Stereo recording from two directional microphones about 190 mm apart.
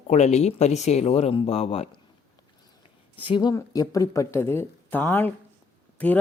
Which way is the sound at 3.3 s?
20° left (ahead or behind).